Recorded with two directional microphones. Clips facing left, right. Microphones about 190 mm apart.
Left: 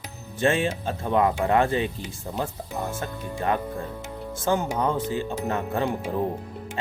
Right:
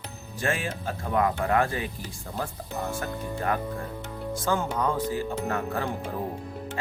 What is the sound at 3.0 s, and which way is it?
Speech, 25° left (ahead or behind).